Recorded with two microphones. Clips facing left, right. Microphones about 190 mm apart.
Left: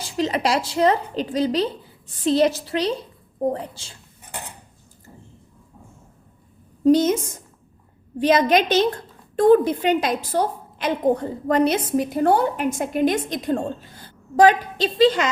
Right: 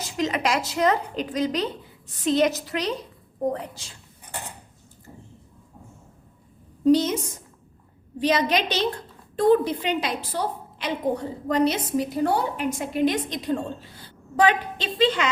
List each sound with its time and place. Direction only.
0.0 s a woman's voice: 30° left (ahead or behind)
6.8 s a woman's voice: 50° left (ahead or behind)
8.2 s a woman's voice: 50° left (ahead or behind)